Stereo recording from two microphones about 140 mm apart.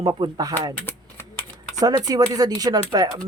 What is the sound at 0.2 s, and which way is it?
Speech, 25° right (ahead or behind).